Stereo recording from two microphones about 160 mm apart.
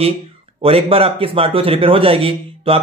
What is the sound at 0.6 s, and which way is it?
Speech, 35° right (ahead or behind).